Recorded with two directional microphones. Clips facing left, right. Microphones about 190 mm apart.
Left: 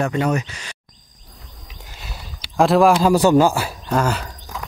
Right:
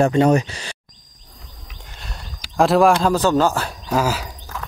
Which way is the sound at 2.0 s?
5° left (ahead or behind).